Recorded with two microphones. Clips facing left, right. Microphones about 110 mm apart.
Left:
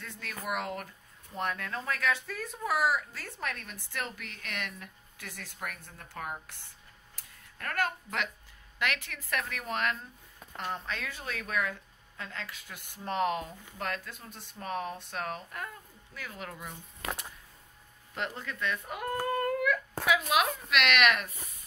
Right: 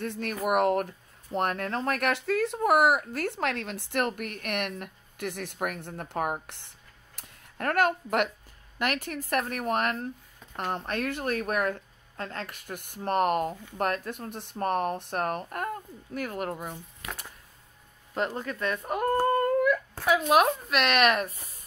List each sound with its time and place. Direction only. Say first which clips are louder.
0.0 s speech: right 10 dB; 60° right (ahead or behind)
7.2 s a sound: right 11 dB; 60° right (ahead or behind)
8.7 s a woman's voice: right 5 dB; 45° right (ahead or behind)
18.1 s a woman's voice: right 7 dB; 40° right (ahead or behind)